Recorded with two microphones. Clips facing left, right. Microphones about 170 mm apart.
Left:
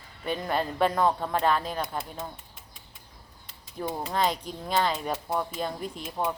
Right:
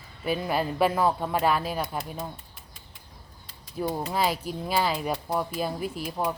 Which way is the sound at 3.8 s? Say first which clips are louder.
Right 1 dB; 10° right (ahead or behind).